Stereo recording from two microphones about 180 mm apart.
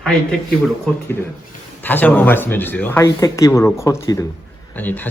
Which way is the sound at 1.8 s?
10° left (ahead or behind).